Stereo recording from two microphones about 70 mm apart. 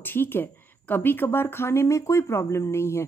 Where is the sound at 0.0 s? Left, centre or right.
Left.